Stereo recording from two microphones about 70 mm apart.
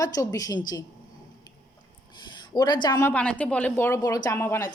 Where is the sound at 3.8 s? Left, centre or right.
Left.